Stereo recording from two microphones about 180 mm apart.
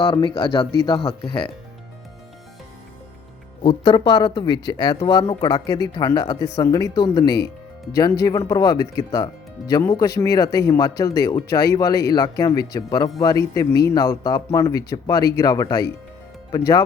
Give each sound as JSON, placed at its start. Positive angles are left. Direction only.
{"t": 0.0, "sound": "speech", "side_deg": 25}
{"t": 3.6, "sound": "speech", "side_deg": 30}